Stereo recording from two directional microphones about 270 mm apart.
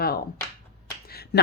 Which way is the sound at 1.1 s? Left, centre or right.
Left.